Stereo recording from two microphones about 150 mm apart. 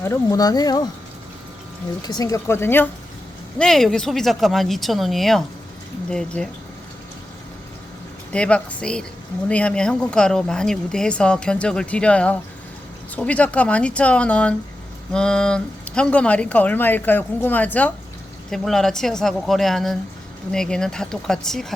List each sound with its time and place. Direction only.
0.0 s speech: 20° left (ahead or behind)
2.0 s speech: 25° left (ahead or behind)
3.6 s speech: centre (ahead or behind)
8.3 s speech: 5° left (ahead or behind)